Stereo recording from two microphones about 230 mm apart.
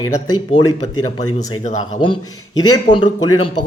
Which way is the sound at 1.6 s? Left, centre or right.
Left.